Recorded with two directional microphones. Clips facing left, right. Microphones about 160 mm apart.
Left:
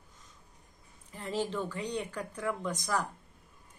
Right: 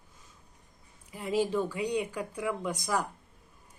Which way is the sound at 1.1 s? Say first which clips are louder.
Right 5 dB; 10° right (ahead or behind).